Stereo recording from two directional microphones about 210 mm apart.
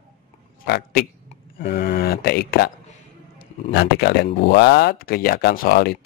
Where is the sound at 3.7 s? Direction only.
50° left (ahead or behind).